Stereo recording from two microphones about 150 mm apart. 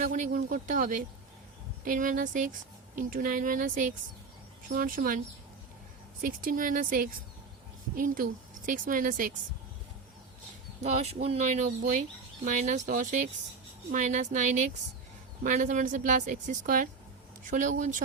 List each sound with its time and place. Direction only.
0.0 s speech: 60° right (ahead or behind)
6.2 s speech: 65° right (ahead or behind)
10.8 s speech: 45° right (ahead or behind)